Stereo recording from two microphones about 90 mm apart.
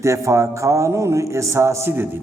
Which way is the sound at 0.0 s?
35° right (ahead or behind).